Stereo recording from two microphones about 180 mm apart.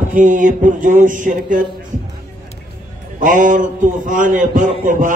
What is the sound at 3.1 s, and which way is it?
Music, 45° right (ahead or behind).